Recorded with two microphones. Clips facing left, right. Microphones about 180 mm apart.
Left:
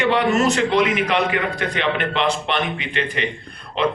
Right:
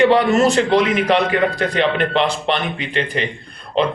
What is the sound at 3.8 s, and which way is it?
Speech, 35° right (ahead or behind).